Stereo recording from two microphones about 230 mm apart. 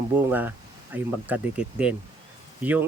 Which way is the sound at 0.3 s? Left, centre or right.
Centre.